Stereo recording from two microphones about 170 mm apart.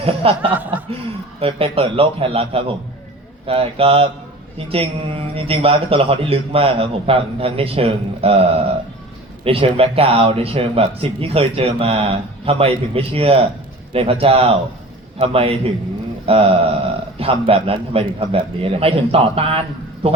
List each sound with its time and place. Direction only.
0.0 s speech: 35° right (ahead or behind)
0.4 s speech: 10° right (ahead or behind)
1.4 s speech: 35° right (ahead or behind)